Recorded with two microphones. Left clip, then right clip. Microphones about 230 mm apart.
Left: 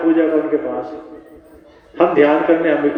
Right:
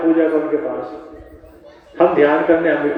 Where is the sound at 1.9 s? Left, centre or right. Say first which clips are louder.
Even; left.